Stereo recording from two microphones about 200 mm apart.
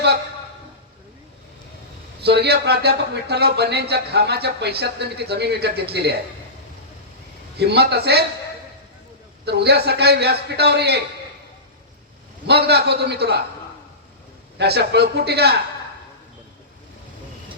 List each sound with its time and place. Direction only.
2.2 s speech: 55° right (ahead or behind)
7.5 s a man's voice: 55° right (ahead or behind)
9.5 s speech: 55° right (ahead or behind)
12.5 s a man's voice: 55° right (ahead or behind)
14.6 s speech: 55° right (ahead or behind)